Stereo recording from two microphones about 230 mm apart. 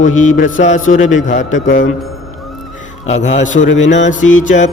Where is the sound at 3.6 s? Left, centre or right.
Left.